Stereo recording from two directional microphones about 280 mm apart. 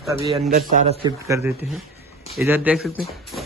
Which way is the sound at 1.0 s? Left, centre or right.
Centre.